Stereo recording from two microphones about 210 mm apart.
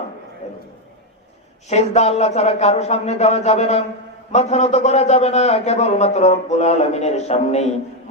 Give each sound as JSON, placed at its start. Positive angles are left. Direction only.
{"t": 0.4, "sound": "a man's voice", "side_deg": 30}
{"t": 1.7, "sound": "a man's voice", "side_deg": 30}